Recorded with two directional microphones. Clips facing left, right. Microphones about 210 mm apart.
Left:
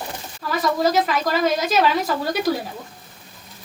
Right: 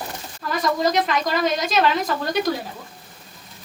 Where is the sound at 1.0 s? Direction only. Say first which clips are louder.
Left 1 dB; 5° left (ahead or behind).